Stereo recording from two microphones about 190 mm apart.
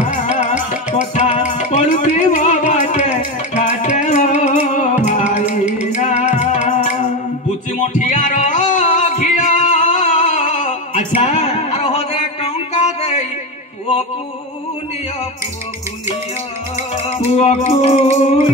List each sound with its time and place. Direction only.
0.0 s music: 35° left (ahead or behind)
8.0 s music: 40° left (ahead or behind)
17.1 s music: 35° left (ahead or behind)